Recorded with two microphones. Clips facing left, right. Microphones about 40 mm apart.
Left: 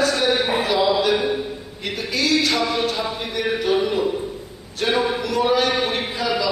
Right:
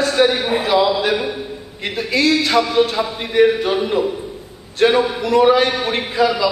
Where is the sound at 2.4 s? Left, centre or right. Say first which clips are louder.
Right 5 dB; right.